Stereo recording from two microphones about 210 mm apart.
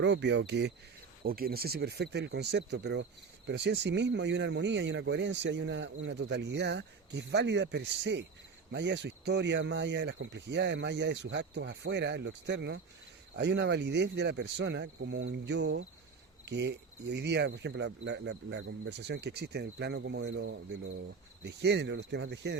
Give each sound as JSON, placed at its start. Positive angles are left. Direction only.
{"t": 0.0, "sound": "speech", "side_deg": -55}